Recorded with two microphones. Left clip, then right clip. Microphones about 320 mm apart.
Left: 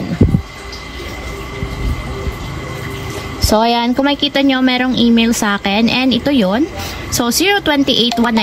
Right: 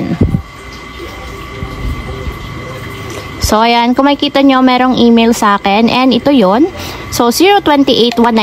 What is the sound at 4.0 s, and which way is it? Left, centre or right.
A woman's voice, centre.